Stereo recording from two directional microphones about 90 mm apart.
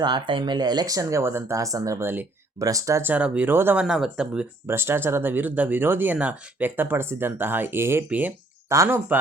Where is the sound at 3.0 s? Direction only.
15° right (ahead or behind).